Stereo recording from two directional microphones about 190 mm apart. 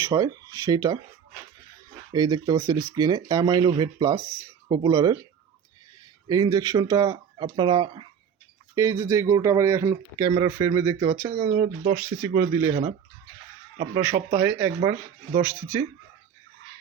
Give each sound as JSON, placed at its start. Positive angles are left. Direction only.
{"t": 0.0, "sound": "speech", "side_deg": -20}
{"t": 2.1, "sound": "speech", "side_deg": -20}
{"t": 6.2, "sound": "speech", "side_deg": -20}
{"t": 11.0, "sound": "speech", "side_deg": -35}
{"t": 11.9, "sound": "speech", "side_deg": -15}
{"t": 13.9, "sound": "speech", "side_deg": -15}